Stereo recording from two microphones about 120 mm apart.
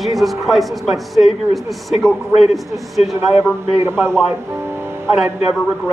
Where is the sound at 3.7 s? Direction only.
20° right (ahead or behind).